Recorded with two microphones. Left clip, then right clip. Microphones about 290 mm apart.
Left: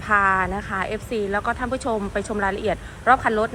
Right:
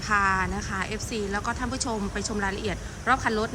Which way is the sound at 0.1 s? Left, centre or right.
Centre.